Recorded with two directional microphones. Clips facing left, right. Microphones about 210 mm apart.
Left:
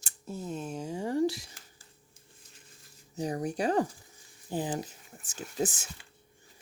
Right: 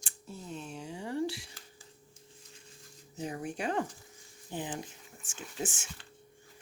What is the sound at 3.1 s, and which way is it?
Speech, 40° left (ahead or behind).